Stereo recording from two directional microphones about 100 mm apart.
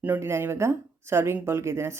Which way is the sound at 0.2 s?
25° right (ahead or behind).